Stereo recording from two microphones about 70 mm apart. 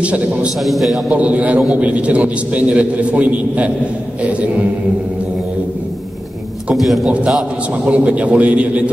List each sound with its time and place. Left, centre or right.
0.0 s a man's voice: centre
0.6 s a man's voice: centre
1.1 s a man's voice: right
6.7 s a man's voice: centre
7.1 s a man's voice: centre